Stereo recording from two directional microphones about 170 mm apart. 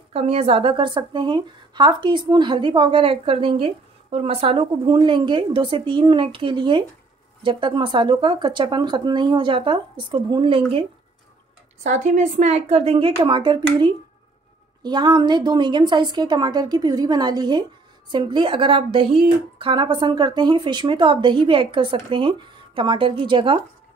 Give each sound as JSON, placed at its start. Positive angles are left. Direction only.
{"t": 0.1, "sound": "speech", "side_deg": -35}
{"t": 11.8, "sound": "a woman's voice", "side_deg": -45}
{"t": 14.8, "sound": "speech", "side_deg": -25}